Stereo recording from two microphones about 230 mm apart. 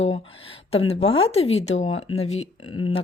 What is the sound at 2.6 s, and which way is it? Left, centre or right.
Speech, left.